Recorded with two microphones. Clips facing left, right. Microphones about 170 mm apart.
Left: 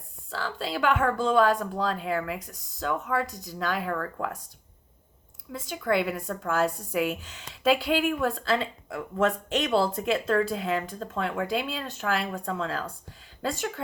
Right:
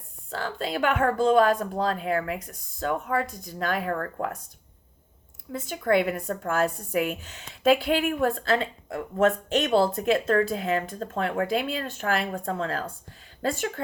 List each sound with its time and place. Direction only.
0.3 s speech: 50° right (ahead or behind)
5.5 s speech: 50° right (ahead or behind)